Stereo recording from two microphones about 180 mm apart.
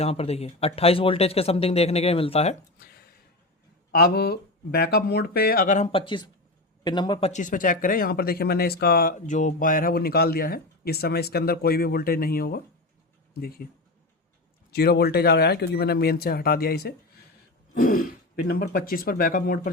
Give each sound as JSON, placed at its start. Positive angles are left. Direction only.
{"t": 0.0, "sound": "speech", "side_deg": 35}
{"t": 2.7, "sound": "a sound", "side_deg": 60}
{"t": 3.9, "sound": "speech", "side_deg": 60}
{"t": 5.9, "sound": "speech", "side_deg": 30}
{"t": 7.3, "sound": "speech", "side_deg": 45}
{"t": 14.7, "sound": "speech", "side_deg": 60}